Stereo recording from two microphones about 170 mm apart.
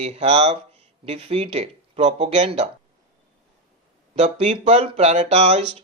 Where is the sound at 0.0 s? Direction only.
35° right (ahead or behind).